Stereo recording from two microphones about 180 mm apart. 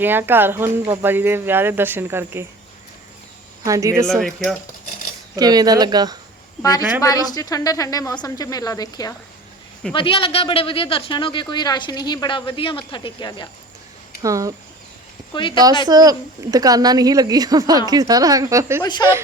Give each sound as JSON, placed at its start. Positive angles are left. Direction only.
{"t": 0.0, "sound": "speech", "side_deg": -10}
{"t": 3.6, "sound": "speech", "side_deg": -20}
{"t": 4.2, "sound": "speech", "side_deg": 0}
{"t": 5.4, "sound": "a woman's voice", "side_deg": -20}
{"t": 6.6, "sound": "speech", "side_deg": 20}
{"t": 14.2, "sound": "a woman's voice", "side_deg": -20}
{"t": 15.3, "sound": "speech", "side_deg": 25}
{"t": 15.9, "sound": "a woman's voice", "side_deg": -20}
{"t": 18.8, "sound": "speech", "side_deg": 25}